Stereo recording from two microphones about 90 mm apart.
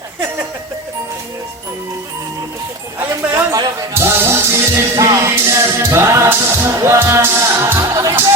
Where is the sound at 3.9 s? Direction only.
30° right (ahead or behind).